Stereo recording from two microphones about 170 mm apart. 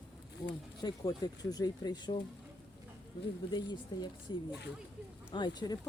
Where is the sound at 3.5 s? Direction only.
25° left (ahead or behind).